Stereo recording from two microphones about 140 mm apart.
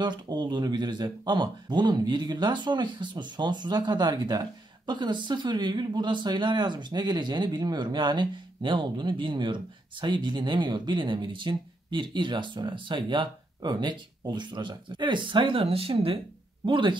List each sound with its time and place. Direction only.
0.0 s speech: 35° right (ahead or behind)